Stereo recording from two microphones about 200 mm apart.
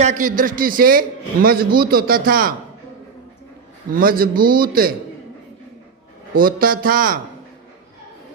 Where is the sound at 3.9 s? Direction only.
45° right (ahead or behind).